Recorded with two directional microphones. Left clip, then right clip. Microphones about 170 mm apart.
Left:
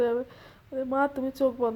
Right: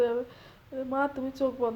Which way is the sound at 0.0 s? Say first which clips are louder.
Left 1 dB; 30° left (ahead or behind).